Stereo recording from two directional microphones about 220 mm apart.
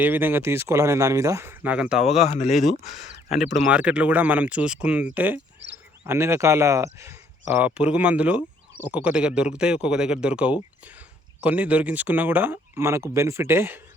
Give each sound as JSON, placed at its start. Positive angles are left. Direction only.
{"t": 0.0, "sound": "speech", "side_deg": -10}
{"t": 2.0, "sound": "speech", "side_deg": 30}
{"t": 3.7, "sound": "speech", "side_deg": -5}